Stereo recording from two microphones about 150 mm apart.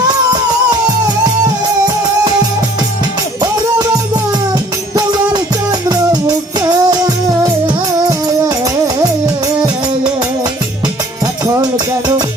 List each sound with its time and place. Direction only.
3.4 s music: 25° right (ahead or behind)
5.9 s music: 25° right (ahead or behind)
8.4 s music: 20° right (ahead or behind)